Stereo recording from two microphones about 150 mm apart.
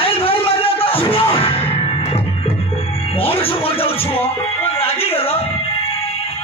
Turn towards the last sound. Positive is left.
turn(degrees=40)  # may be behind; listen again after turning